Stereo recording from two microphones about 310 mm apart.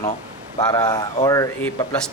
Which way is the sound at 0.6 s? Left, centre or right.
Centre.